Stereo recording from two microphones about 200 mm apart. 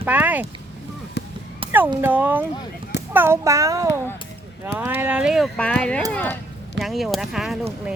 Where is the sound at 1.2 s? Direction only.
55° left (ahead or behind).